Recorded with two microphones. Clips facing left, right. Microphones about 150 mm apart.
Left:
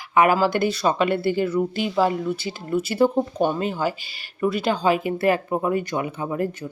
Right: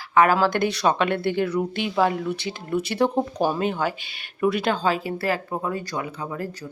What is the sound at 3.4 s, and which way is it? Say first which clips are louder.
Speech: left 2 dB; 15° right (ahead or behind).